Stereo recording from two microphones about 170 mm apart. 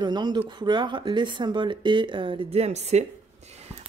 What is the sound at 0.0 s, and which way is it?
Speech, 25° right (ahead or behind).